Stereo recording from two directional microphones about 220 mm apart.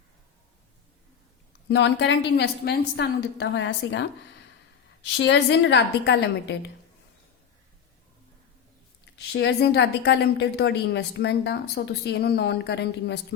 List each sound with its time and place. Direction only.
1.6 s a woman's voice: 50° left (ahead or behind)
5.1 s a woman's voice: 55° left (ahead or behind)
9.1 s a woman's voice: 50° left (ahead or behind)